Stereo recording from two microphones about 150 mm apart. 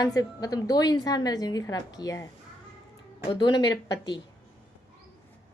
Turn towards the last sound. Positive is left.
turn(degrees=30)  # may be behind; listen again after turning